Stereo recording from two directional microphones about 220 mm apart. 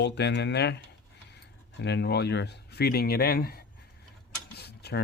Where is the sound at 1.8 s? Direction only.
50° left (ahead or behind).